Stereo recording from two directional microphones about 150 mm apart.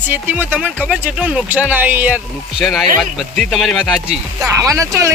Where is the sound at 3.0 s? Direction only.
Centre (ahead or behind).